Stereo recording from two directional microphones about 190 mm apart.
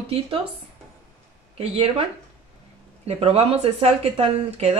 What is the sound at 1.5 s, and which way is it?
Speech, 30° right (ahead or behind).